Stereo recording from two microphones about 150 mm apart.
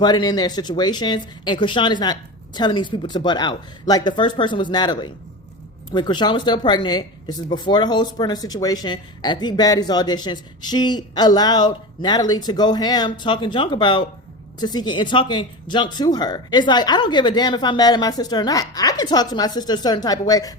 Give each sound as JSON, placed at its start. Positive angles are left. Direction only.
{"t": 0.0, "sound": "speech", "side_deg": 25}